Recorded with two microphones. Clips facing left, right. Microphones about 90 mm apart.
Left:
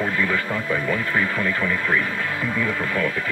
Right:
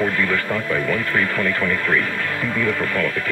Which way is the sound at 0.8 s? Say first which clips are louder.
Right 2 dB; 10° left (ahead or behind).